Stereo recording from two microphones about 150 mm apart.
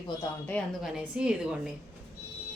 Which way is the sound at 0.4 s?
10° left (ahead or behind).